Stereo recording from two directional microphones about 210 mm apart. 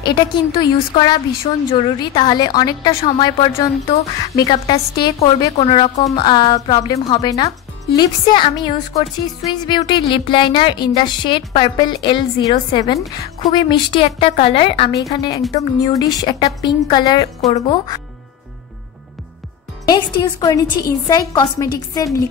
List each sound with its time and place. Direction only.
0.0 s speech: 20° left (ahead or behind)
19.9 s a woman's voice: 20° left (ahead or behind)